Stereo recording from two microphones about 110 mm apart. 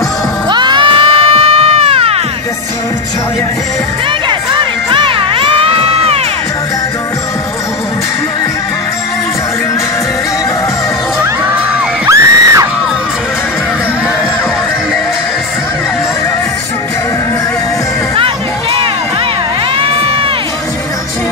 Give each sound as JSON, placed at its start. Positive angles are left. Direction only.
{"t": 0.5, "sound": "music", "side_deg": -45}
{"t": 4.9, "sound": "crowd", "side_deg": -50}
{"t": 12.1, "sound": "a sound", "side_deg": -30}
{"t": 18.1, "sound": "crowd", "side_deg": -55}